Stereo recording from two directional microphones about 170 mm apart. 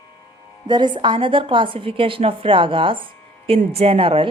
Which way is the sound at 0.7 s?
25° right (ahead or behind).